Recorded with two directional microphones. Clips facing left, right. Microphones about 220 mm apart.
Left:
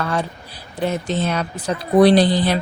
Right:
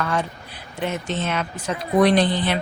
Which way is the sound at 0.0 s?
35° left (ahead or behind).